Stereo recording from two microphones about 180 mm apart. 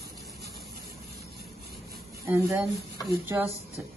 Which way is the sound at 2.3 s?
10° right (ahead or behind).